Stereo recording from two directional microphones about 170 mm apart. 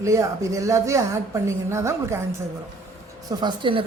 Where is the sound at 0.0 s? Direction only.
20° right (ahead or behind).